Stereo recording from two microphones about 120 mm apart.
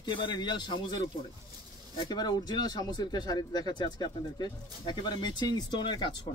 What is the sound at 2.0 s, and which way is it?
Speech, 35° left (ahead or behind).